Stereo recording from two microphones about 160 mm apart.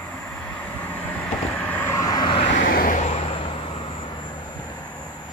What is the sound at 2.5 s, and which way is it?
Vehicle, 60° left (ahead or behind).